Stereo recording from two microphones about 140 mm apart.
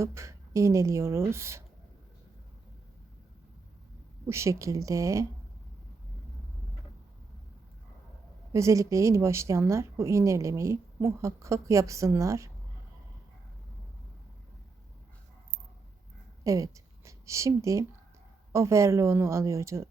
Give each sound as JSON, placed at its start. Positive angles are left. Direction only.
{"t": 0.0, "sound": "speech", "side_deg": -20}
{"t": 4.3, "sound": "speech", "side_deg": -20}
{"t": 8.5, "sound": "speech", "side_deg": -20}
{"t": 16.4, "sound": "a woman's voice", "side_deg": -25}